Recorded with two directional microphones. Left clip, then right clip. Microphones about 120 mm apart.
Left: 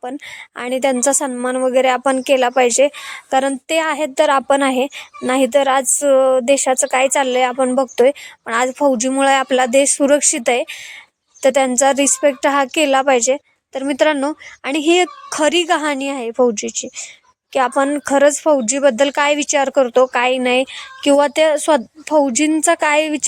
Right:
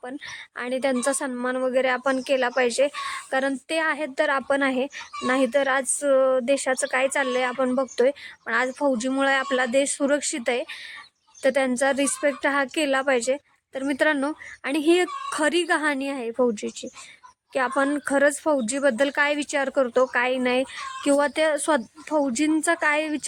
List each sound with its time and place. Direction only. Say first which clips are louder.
0.0 s a woman's voice: left 7 dB; 25° left (ahead or behind)